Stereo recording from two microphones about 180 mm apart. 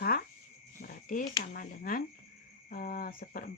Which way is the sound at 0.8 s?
50° left (ahead or behind).